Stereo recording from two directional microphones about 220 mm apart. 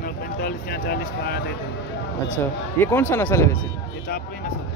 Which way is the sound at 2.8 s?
10° left (ahead or behind).